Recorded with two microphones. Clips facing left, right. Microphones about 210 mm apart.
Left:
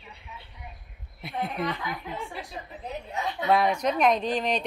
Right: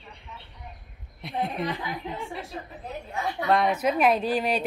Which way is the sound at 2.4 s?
20° left (ahead or behind).